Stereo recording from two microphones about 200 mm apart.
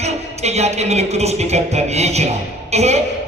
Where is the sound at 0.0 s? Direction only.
35° right (ahead or behind).